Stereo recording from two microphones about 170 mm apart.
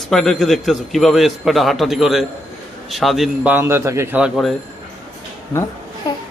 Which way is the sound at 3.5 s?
15° right (ahead or behind).